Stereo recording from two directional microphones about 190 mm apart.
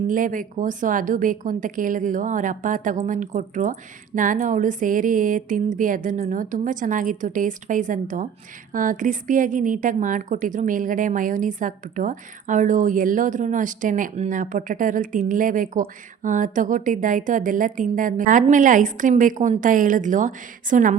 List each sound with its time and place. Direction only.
0.1 s a woman's voice: 45° right (ahead or behind)